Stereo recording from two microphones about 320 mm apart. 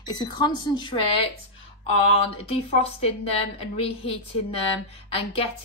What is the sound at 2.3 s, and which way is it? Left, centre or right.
A woman's voice, centre.